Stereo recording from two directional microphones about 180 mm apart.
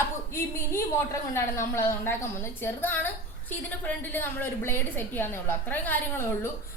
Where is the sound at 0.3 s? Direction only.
15° left (ahead or behind).